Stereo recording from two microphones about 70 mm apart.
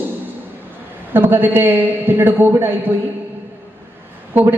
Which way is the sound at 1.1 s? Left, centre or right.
Right.